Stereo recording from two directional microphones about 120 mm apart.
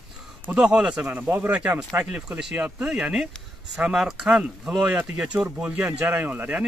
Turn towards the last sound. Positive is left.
turn(degrees=-15)  # may be behind; listen again after turning